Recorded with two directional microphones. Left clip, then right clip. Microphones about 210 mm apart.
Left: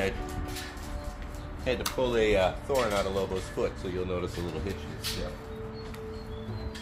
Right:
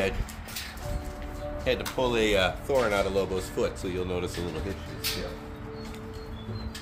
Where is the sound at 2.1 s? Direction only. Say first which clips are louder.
Even; 60° right (ahead or behind).